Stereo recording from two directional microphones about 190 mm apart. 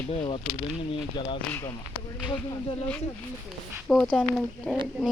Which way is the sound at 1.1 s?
25° left (ahead or behind).